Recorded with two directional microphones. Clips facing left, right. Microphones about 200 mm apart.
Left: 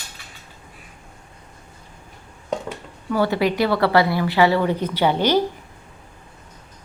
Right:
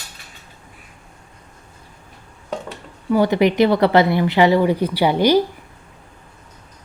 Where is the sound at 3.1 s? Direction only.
15° right (ahead or behind).